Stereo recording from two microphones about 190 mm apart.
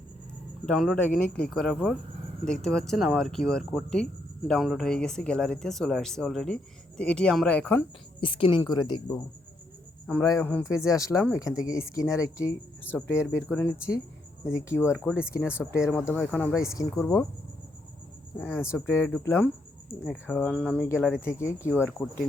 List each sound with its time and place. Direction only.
0.6 s speech: centre (ahead or behind)
8.2 s speech: 25° left (ahead or behind)
10.1 s speech: 15° left (ahead or behind)
15.0 s speech: 5° right (ahead or behind)
15.3 s speech: 10° left (ahead or behind)
18.3 s speech: 10° left (ahead or behind)